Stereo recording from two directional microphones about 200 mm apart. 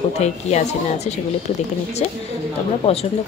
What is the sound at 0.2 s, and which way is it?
Speech, 35° left (ahead or behind).